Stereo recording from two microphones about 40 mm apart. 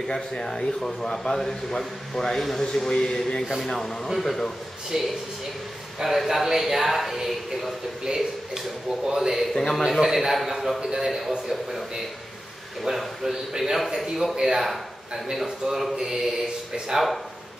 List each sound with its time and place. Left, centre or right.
0.1 s speech: centre
4.9 s a man's voice: centre
6.0 s speech: centre
9.0 s a man's voice: centre
9.5 s speech: centre
9.8 s speech: centre
10.8 s a man's voice: right
11.1 s speech: centre
12.8 s a man's voice: centre